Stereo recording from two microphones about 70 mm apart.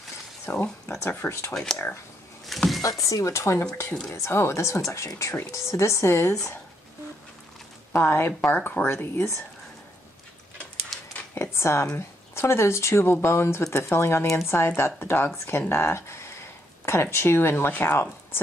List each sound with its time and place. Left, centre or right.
0.5 s speech: left
1.5 s speech: centre
2.4 s a sound: centre
2.8 s speech: left
3.6 s speech: centre
4.1 s speech: left
7.9 s speech: left
11.3 s a sound: left
12.4 s speech: left